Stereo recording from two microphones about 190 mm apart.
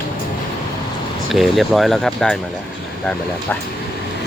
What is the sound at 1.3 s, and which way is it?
Speech, centre (ahead or behind).